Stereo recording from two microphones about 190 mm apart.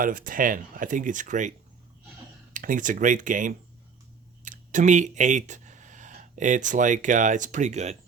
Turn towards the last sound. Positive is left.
turn(degrees=-35)  # may be behind; listen again after turning